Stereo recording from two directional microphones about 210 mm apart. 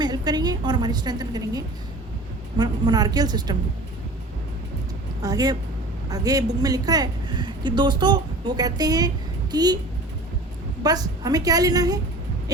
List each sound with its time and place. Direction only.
0.0 s a woman's voice: 20° right (ahead or behind)
5.2 s a woman's voice: 15° right (ahead or behind)
10.8 s a woman's voice: 15° right (ahead or behind)